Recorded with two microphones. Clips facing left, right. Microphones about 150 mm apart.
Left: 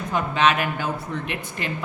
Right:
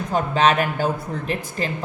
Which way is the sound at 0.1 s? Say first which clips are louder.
Right 2 dB; 35° right (ahead or behind).